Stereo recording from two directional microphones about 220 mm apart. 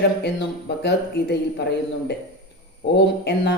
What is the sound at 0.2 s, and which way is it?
Speech, 50° left (ahead or behind).